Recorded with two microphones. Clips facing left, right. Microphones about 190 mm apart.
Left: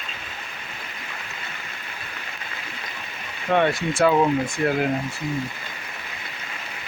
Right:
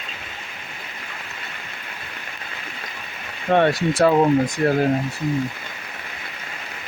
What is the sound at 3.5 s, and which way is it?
Speech, 35° right (ahead or behind).